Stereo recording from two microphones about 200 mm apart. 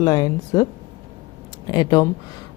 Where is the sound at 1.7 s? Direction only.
20° left (ahead or behind).